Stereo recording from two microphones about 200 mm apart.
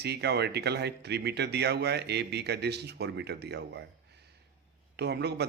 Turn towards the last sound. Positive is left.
turn(degrees=-55)  # may be behind; listen again after turning